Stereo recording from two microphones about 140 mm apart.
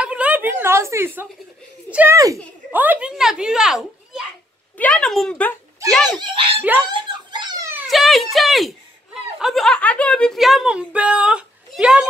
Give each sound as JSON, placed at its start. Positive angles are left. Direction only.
{"t": 0.0, "sound": "a sound", "side_deg": -10}
{"t": 1.9, "sound": "speech", "side_deg": -10}
{"t": 2.1, "sound": "a woman's voice", "side_deg": -25}
{"t": 2.7, "sound": "speech", "side_deg": -10}
{"t": 4.7, "sound": "a woman's voice", "side_deg": 10}
{"t": 6.2, "sound": "speech", "side_deg": -40}
{"t": 6.9, "sound": "a sound", "side_deg": -35}
{"t": 7.9, "sound": "speech", "side_deg": 0}